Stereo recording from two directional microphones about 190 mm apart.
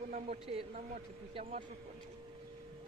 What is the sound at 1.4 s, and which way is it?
Speech, 45° right (ahead or behind).